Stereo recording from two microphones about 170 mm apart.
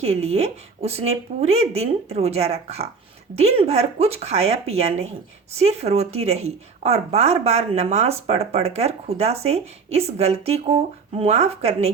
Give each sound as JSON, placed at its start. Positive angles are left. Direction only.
{"t": 0.0, "sound": "speech", "side_deg": -35}